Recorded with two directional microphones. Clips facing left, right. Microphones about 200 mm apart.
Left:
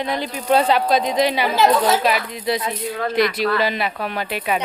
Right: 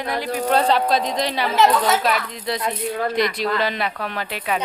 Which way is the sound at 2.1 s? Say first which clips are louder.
Left 2 dB; 5° left (ahead or behind).